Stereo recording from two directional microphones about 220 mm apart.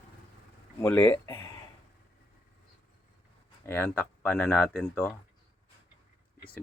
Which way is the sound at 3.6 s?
10° left (ahead or behind).